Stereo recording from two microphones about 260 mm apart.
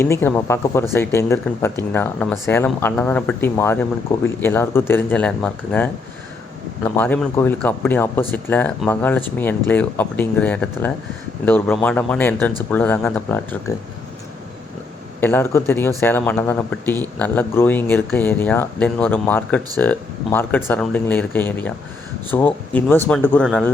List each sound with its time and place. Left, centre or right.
0.0 s speech: centre
6.9 s speech: centre
15.2 s speech: centre